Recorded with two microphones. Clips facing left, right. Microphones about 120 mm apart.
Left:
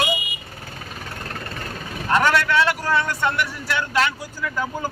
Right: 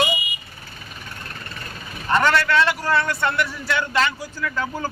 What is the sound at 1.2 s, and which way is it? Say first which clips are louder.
Vehicle: left 6 dB; 55° left (ahead or behind).